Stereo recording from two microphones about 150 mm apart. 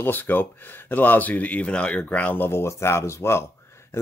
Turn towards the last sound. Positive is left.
turn(degrees=15)  # may be behind; listen again after turning